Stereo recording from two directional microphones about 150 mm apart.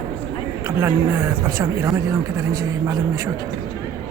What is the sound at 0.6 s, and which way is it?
Speech, 20° right (ahead or behind).